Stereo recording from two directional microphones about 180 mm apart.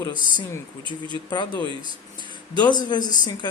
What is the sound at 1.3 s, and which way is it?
Speech, 25° left (ahead or behind).